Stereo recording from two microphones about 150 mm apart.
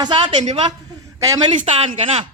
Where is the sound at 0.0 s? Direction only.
30° right (ahead or behind).